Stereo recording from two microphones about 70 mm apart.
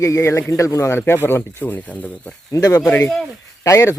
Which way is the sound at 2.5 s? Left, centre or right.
Left.